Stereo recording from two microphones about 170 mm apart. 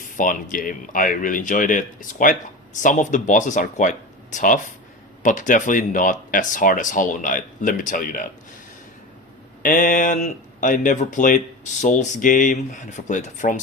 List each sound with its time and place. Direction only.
0.2 s speech: 50° left (ahead or behind)
9.6 s speech: 55° left (ahead or behind)